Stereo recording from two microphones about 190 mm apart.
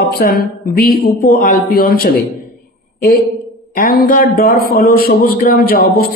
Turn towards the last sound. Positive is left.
turn(degrees=55)  # may be behind; listen again after turning